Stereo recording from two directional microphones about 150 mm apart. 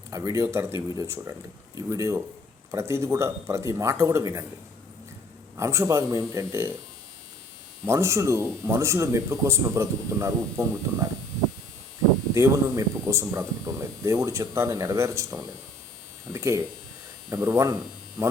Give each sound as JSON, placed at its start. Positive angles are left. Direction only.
{"t": 0.1, "sound": "speech", "side_deg": -25}
{"t": 5.5, "sound": "speech", "side_deg": -20}
{"t": 7.9, "sound": "speech", "side_deg": -20}
{"t": 12.3, "sound": "speech", "side_deg": -20}